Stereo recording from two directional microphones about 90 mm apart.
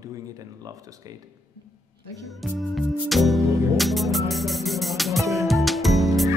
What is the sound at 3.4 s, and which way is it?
Speech, 35° right (ahead or behind).